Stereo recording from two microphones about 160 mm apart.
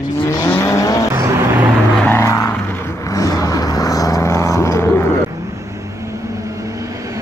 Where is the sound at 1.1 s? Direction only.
20° right (ahead or behind).